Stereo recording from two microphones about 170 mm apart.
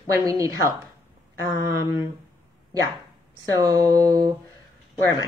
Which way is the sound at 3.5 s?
25° right (ahead or behind).